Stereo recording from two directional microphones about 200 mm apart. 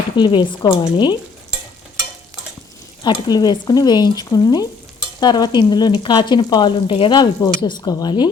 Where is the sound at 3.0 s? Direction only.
20° left (ahead or behind).